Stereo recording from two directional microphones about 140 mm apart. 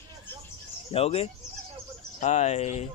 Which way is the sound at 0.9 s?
45° left (ahead or behind).